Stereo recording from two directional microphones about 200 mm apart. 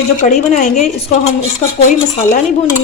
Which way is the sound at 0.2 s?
35° left (ahead or behind).